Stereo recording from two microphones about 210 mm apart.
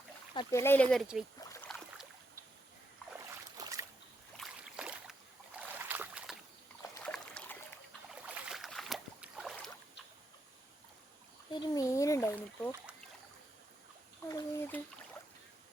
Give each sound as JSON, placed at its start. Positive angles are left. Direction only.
{"t": 0.3, "sound": "speech", "side_deg": 15}
{"t": 1.4, "sound": "rowboat", "side_deg": 15}
{"t": 3.6, "sound": "boat", "side_deg": -15}
{"t": 4.4, "sound": "boat", "side_deg": -5}
{"t": 6.8, "sound": "boat", "side_deg": 15}
{"t": 7.1, "sound": "a sound", "side_deg": 5}
{"t": 8.2, "sound": "boat", "side_deg": -5}
{"t": 11.5, "sound": "a sound", "side_deg": 20}
{"t": 14.3, "sound": "bathtub", "side_deg": 15}